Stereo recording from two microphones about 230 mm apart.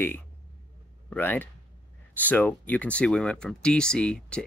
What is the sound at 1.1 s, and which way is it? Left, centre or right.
Speech, centre.